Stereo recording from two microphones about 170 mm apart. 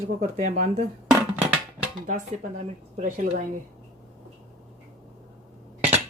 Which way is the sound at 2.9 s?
45° right (ahead or behind).